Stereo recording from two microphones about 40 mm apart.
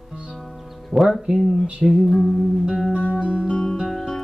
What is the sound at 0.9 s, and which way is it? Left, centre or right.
Music, right.